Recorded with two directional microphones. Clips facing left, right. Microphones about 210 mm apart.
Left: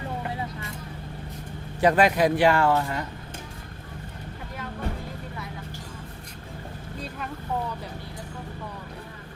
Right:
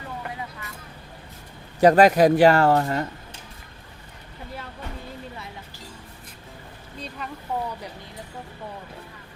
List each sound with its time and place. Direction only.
1.8 s speech: 40° right (ahead or behind)